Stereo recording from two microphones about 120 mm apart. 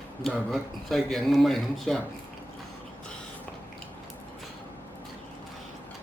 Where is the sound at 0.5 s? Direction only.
Centre (ahead or behind).